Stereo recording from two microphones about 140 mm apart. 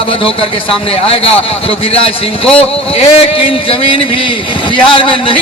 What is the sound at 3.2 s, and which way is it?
A man's voice, 40° left (ahead or behind).